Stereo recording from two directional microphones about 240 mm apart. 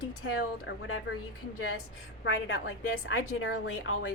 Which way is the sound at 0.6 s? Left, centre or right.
Left.